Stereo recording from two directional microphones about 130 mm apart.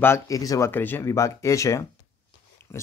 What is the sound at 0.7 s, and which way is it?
Speech, 15° left (ahead or behind).